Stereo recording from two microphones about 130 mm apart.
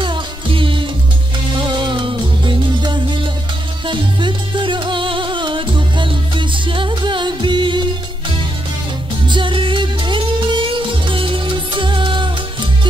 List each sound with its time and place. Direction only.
0.0 s music: 40° right (ahead or behind)
9.3 s music: 40° right (ahead or behind)